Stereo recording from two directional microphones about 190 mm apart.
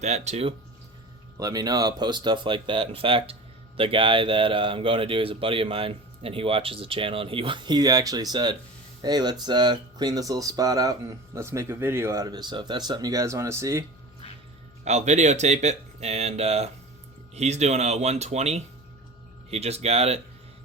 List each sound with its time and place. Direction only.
0.0 s speech: 35° right (ahead or behind)
1.4 s speech: 20° right (ahead or behind)
14.8 s speech: 35° right (ahead or behind)